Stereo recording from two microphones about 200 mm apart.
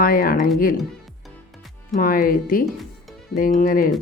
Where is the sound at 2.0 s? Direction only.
45° left (ahead or behind).